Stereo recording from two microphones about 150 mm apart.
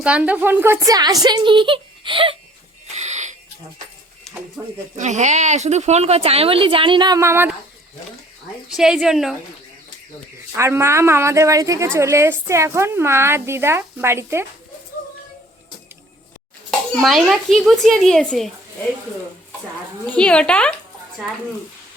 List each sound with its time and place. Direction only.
0.0 s a woman's voice: 10° right (ahead or behind); by 2.3 s 35° right (ahead or behind)
2.8 s a sound: 50° right (ahead or behind)
4.6 s a woman's voice: 15° right (ahead or behind)
4.9 s a woman's voice: 50° right (ahead or behind); by 7.5 s 15° right (ahead or behind)
8.7 s speech: 5° right (ahead or behind)
10.6 s a woman's voice: 15° right (ahead or behind)
16.9 s speech: centre (ahead or behind)
20.1 s speech: 5° left (ahead or behind)